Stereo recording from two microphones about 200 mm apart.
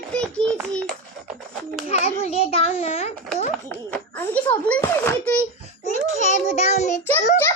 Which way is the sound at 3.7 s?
10° left (ahead or behind).